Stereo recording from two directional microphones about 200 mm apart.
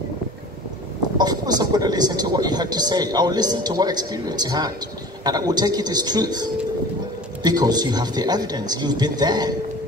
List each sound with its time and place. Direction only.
1.1 s speech: 20° right (ahead or behind)